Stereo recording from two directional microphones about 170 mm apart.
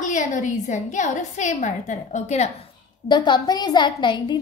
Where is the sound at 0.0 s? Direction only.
45° left (ahead or behind).